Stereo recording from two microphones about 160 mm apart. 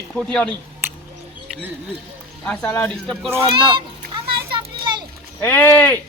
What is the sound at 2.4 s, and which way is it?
Speech, 5° left (ahead or behind).